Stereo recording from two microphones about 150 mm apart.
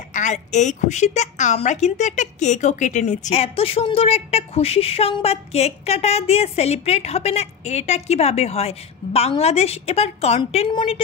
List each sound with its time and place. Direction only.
0.1 s a woman's voice: 55° left (ahead or behind)
10.7 s a woman's voice: 30° left (ahead or behind)